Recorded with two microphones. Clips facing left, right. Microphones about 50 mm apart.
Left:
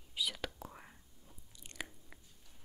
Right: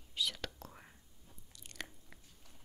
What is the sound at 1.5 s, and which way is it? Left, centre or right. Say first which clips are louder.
Biting: left 1 dB; centre.